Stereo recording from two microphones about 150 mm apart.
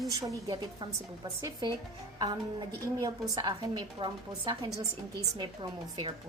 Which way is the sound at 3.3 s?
25° right (ahead or behind).